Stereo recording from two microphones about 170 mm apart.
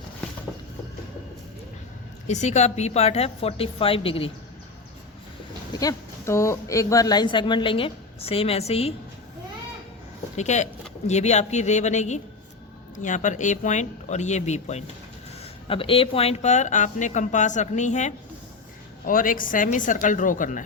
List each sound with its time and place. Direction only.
2.2 s a woman's voice: 45° left (ahead or behind)
5.7 s speech: 20° left (ahead or behind); by 9.0 s 35° left (ahead or behind)
10.3 s speech: 45° left (ahead or behind)